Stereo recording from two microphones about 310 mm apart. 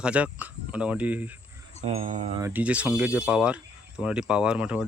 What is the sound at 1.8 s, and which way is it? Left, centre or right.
Speech, right.